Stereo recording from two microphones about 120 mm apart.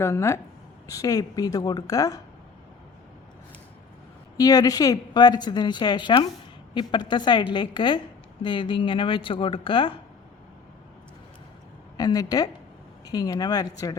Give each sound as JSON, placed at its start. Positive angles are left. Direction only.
{"t": 0.0, "sound": "a woman's voice", "side_deg": 25}
{"t": 4.4, "sound": "a woman's voice", "side_deg": 30}
{"t": 11.9, "sound": "a woman's voice", "side_deg": 30}